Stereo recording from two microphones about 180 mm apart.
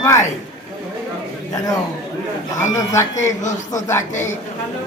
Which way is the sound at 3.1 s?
40° left (ahead or behind).